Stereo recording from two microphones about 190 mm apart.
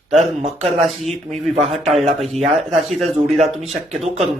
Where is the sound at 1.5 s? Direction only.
30° right (ahead or behind).